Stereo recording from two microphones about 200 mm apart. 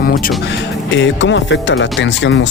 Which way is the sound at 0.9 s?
65° left (ahead or behind).